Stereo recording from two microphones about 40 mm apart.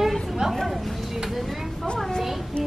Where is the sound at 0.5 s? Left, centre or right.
Centre.